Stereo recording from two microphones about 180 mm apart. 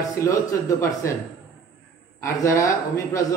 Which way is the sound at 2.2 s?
15° left (ahead or behind).